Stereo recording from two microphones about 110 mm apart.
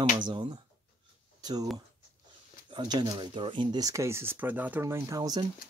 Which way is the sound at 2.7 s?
45° right (ahead or behind).